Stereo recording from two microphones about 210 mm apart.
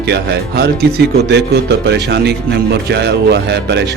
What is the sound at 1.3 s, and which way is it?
Speech, 55° right (ahead or behind).